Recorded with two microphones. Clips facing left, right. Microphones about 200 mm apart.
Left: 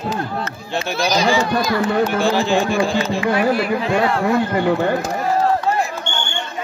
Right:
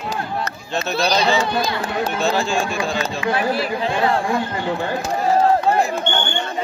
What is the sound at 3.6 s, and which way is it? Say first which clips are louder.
Speech: left 3 dB; 30° right (ahead or behind).